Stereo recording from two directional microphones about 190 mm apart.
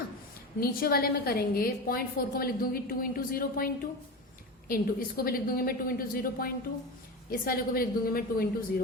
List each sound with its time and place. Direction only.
0.6 s a woman's voice: 50° left (ahead or behind)